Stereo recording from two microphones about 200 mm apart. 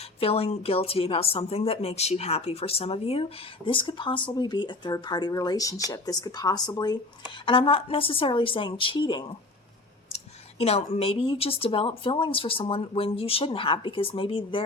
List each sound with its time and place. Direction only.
0.0 s a woman's voice: 30° left (ahead or behind)
10.6 s a woman's voice: 30° left (ahead or behind)